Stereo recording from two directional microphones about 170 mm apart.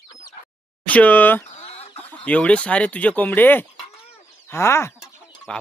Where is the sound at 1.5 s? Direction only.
40° left (ahead or behind).